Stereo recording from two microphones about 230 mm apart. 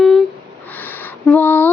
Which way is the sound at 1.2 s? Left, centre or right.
Centre.